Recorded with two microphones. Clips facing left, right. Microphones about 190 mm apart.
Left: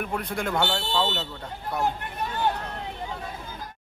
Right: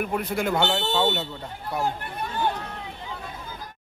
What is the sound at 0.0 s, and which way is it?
Speech, 5° right (ahead or behind).